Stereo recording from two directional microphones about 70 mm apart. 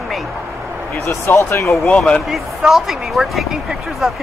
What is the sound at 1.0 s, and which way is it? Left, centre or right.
Speech, left.